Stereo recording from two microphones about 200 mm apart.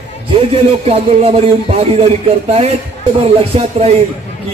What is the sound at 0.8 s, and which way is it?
A man's voice, 30° right (ahead or behind).